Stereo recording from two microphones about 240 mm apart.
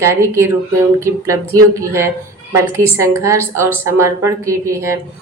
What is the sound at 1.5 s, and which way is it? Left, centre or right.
A woman's voice, centre.